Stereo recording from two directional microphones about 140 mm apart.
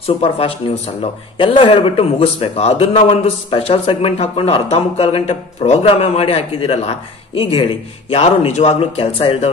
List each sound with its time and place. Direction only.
0.0 s a man's voice: 45° left (ahead or behind)